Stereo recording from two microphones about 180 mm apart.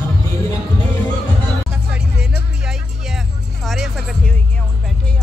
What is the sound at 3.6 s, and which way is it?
Music, centre (ahead or behind).